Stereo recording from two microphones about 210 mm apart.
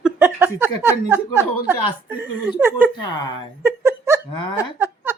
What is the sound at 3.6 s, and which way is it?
Laughter, 10° right (ahead or behind).